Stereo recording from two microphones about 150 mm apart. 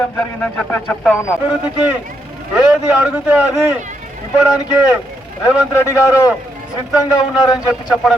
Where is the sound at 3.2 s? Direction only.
10° right (ahead or behind).